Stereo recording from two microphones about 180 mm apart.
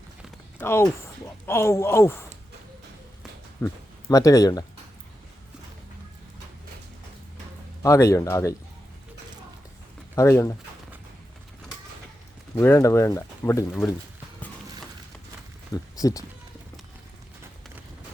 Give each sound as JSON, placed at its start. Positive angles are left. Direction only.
{"t": 0.6, "sound": "speech", "side_deg": 15}
{"t": 3.6, "sound": "speech", "side_deg": 15}
{"t": 7.8, "sound": "speech", "side_deg": 15}
{"t": 10.2, "sound": "speech", "side_deg": 15}
{"t": 12.5, "sound": "speech", "side_deg": 15}
{"t": 15.7, "sound": "speech", "side_deg": 20}